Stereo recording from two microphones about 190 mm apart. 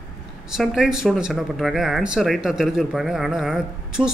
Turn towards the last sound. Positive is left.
turn(degrees=-5)  # may be behind; listen again after turning